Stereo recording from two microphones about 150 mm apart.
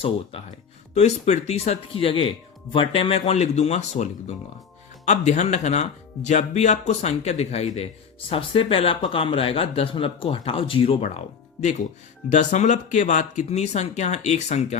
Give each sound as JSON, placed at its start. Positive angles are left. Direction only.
{"t": 0.9, "sound": "speech", "side_deg": 45}